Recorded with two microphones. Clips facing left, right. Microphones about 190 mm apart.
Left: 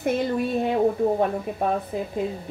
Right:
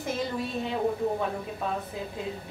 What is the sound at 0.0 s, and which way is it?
Speech, 60° left (ahead or behind).